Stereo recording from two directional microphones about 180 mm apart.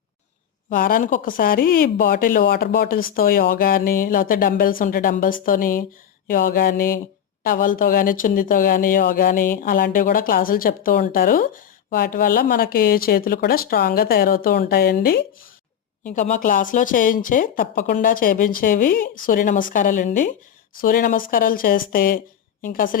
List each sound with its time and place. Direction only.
0.7 s speech: 50° left (ahead or behind)